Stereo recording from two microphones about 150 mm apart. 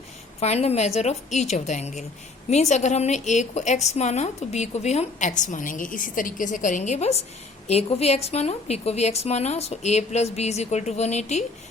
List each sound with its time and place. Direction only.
0.3 s a woman's voice: 45° left (ahead or behind)